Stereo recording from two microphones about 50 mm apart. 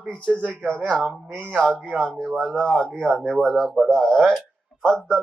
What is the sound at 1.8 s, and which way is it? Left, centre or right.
Speech, centre.